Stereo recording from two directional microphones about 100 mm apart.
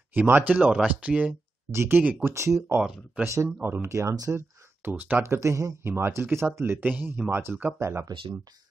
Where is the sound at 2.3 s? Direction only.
30° right (ahead or behind).